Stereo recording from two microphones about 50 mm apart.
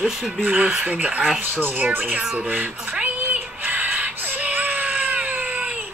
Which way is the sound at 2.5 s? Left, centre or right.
Right.